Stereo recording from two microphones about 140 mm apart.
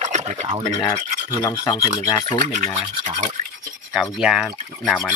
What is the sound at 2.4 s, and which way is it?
Speech, 60° right (ahead or behind).